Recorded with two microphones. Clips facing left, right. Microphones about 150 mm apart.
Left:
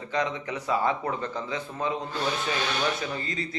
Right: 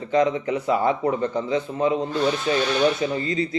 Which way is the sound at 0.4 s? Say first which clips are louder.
Right 5 dB; 25° right (ahead or behind).